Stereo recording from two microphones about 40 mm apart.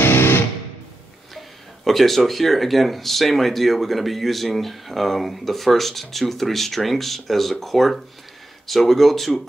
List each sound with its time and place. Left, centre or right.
0.0 s music: left
1.9 s speech: centre